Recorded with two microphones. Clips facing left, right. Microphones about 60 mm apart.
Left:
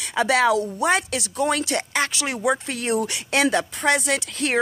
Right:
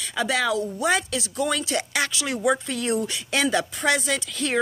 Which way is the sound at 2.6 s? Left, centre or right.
Left.